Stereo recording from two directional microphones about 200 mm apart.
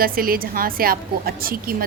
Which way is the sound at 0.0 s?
45° right (ahead or behind).